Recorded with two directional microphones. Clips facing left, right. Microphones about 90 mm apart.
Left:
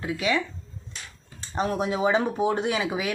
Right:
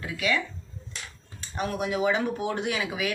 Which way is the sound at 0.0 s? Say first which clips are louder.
Left 2 dB; 25° left (ahead or behind).